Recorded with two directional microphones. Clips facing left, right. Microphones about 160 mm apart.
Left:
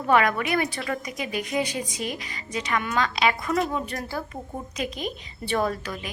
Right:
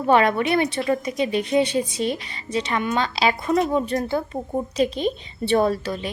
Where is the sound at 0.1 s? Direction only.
30° right (ahead or behind).